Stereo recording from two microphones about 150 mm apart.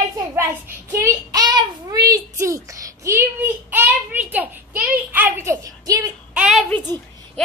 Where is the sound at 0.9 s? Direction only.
20° right (ahead or behind).